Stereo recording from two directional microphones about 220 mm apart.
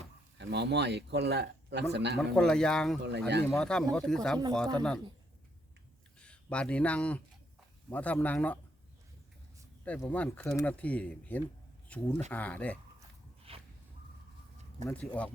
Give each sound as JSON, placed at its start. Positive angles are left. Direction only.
{"t": 0.3, "sound": "speech", "side_deg": -50}
{"t": 2.1, "sound": "speech", "side_deg": 5}
{"t": 3.0, "sound": "speech", "side_deg": -50}
{"t": 3.5, "sound": "speech", "side_deg": 5}
{"t": 6.1, "sound": "speech", "side_deg": 5}
{"t": 9.8, "sound": "speech", "side_deg": 5}
{"t": 13.5, "sound": "a sound", "side_deg": -25}
{"t": 14.8, "sound": "speech", "side_deg": 5}